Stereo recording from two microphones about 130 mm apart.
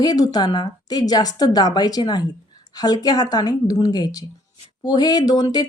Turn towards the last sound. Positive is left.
turn(degrees=30)  # may be behind; listen again after turning